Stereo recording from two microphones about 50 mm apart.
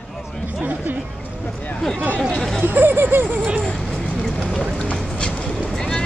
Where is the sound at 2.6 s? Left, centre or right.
Right.